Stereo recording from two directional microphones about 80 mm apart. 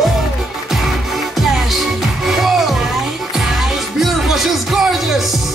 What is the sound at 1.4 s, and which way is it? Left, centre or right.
Music, centre.